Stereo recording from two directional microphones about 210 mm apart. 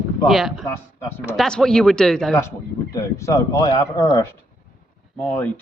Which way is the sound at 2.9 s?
15° left (ahead or behind).